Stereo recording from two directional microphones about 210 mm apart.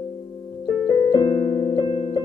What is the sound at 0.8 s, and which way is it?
Piano, 20° left (ahead or behind).